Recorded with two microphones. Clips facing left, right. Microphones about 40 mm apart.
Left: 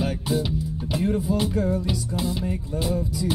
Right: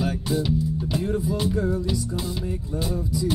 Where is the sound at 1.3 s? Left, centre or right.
Left.